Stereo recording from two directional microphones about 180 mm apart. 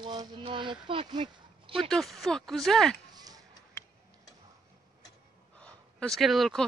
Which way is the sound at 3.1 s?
20° right (ahead or behind).